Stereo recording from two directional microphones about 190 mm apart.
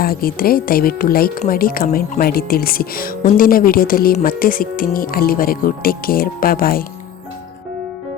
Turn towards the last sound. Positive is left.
turn(degrees=50)  # may be behind; listen again after turning